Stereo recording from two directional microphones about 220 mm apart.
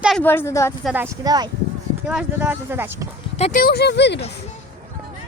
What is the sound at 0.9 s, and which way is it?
Speech, 10° right (ahead or behind).